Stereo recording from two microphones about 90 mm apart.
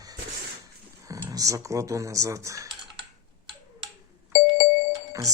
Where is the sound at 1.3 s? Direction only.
35° right (ahead or behind).